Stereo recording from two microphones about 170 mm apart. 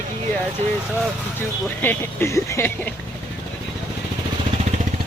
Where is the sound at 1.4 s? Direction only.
15° left (ahead or behind).